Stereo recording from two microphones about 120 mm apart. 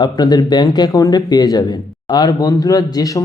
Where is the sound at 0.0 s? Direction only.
35° left (ahead or behind).